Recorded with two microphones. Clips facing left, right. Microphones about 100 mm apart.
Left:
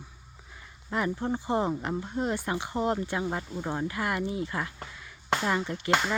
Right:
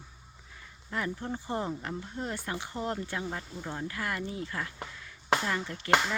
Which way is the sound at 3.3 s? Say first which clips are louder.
Left 6 dB; 30° left (ahead or behind).